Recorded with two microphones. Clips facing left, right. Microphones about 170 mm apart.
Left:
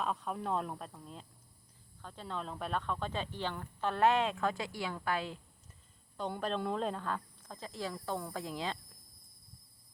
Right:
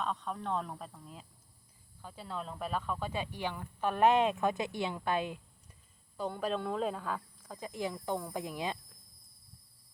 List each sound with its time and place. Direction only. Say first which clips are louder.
0.0 s speech: even; 5° left (ahead or behind); by 5.4 s 20° right (ahead or behind)
6.1 s speech: right 1 dB; 5° right (ahead or behind)